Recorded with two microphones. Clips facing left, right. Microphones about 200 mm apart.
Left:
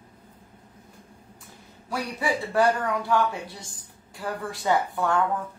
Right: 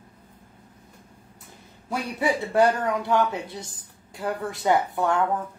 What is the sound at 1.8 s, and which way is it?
Speech, 20° right (ahead or behind).